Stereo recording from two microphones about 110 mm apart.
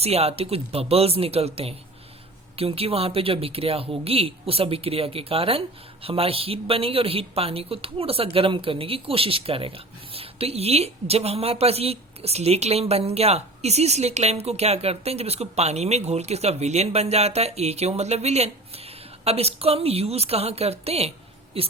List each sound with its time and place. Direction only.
0.0 s a woman's voice: 70° right (ahead or behind)